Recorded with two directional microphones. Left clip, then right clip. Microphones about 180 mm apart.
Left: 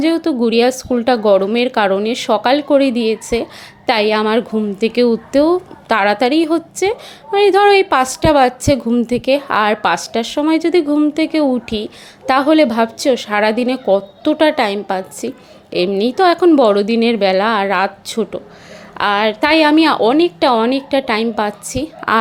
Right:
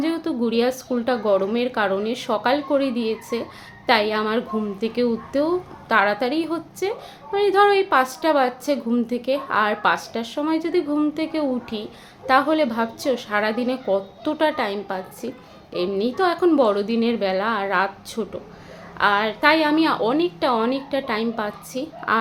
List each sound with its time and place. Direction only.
0.0 s a woman's voice: 40° left (ahead or behind)